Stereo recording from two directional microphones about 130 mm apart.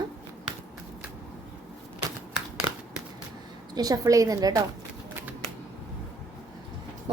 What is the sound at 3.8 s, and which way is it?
Speech, 30° right (ahead or behind).